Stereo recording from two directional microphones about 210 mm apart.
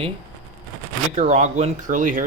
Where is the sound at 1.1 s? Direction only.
35° right (ahead or behind).